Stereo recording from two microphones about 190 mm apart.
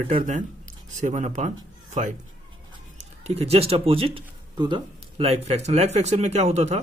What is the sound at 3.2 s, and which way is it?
Speech, 35° right (ahead or behind).